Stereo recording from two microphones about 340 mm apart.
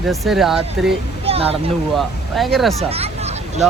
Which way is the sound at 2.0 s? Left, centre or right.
Centre.